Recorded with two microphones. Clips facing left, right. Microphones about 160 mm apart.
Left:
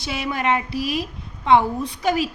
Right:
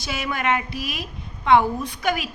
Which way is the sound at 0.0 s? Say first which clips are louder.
Left 2 dB; 30° left (ahead or behind).